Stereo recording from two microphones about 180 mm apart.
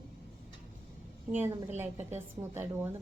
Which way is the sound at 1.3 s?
10° right (ahead or behind).